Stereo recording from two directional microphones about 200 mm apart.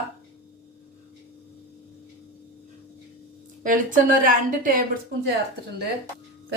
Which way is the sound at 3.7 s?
40° right (ahead or behind).